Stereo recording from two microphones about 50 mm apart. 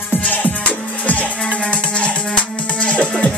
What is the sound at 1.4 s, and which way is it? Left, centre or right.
Music, centre.